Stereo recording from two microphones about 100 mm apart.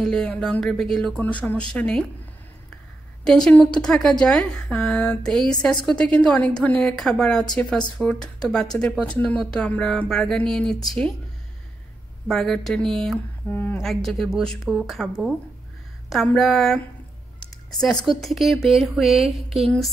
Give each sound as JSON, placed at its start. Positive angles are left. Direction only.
{"t": 0.0, "sound": "a woman's voice", "side_deg": 5}
{"t": 3.3, "sound": "a woman's voice", "side_deg": 5}
{"t": 12.3, "sound": "speech", "side_deg": 5}
{"t": 13.5, "sound": "a woman's voice", "side_deg": 20}
{"t": 13.8, "sound": "speech", "side_deg": 0}
{"t": 16.3, "sound": "speech", "side_deg": 0}